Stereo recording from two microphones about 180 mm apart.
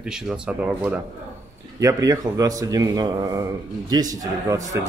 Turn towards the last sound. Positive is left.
turn(degrees=-20)  # may be behind; listen again after turning